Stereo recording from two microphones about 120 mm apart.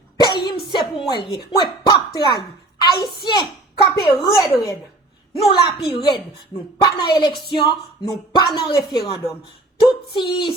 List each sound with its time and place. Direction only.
0.2 s a sound: 35° left (ahead or behind)
1.3 s a child's voice: 35° left (ahead or behind)
5.3 s a child's voice: 50° left (ahead or behind)
5.7 s speech: 40° left (ahead or behind)